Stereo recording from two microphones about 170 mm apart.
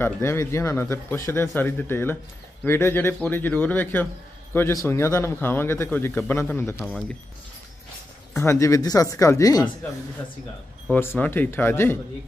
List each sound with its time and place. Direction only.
0.0 s speech: 15° left (ahead or behind)
6.8 s speech: 5° left (ahead or behind)
8.3 s speech: 15° left (ahead or behind)
10.9 s speech: 10° left (ahead or behind)